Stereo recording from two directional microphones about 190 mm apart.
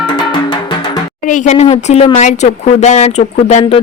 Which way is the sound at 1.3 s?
40° left (ahead or behind).